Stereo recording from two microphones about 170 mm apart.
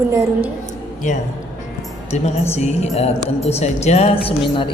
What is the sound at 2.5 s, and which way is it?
A woman's voice, 40° left (ahead or behind).